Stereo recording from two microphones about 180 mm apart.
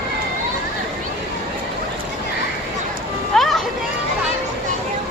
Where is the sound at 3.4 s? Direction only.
Centre (ahead or behind).